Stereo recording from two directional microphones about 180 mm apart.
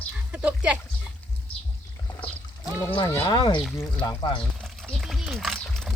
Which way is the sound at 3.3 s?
25° left (ahead or behind).